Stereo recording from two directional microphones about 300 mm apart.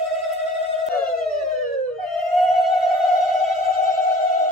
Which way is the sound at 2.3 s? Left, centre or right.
Centre.